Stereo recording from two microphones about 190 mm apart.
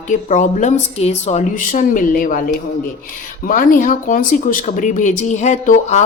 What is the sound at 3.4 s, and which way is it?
Speech, 45° left (ahead or behind).